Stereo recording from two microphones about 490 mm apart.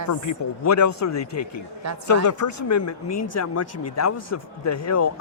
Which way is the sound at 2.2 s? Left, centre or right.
Left.